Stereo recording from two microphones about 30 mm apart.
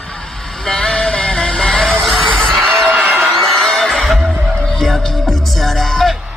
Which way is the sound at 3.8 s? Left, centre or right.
Centre.